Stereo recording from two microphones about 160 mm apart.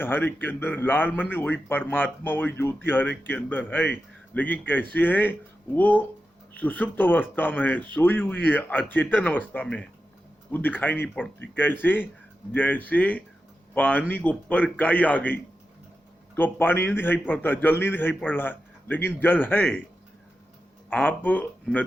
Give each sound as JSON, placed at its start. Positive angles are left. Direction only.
{"t": 0.0, "sound": "a man's voice", "side_deg": 15}
{"t": 20.9, "sound": "a man's voice", "side_deg": 10}